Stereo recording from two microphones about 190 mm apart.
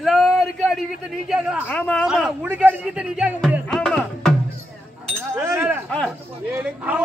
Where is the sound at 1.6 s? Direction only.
5° left (ahead or behind).